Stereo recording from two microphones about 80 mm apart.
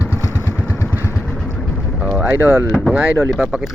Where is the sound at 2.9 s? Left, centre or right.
Centre.